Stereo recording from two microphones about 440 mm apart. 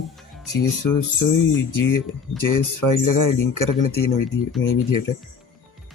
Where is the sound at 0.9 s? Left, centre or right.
Left.